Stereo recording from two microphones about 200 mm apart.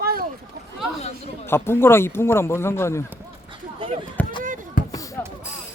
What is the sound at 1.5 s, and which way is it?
Speech, 10° left (ahead or behind).